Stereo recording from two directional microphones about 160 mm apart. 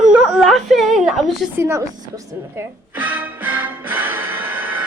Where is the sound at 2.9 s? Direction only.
10° right (ahead or behind).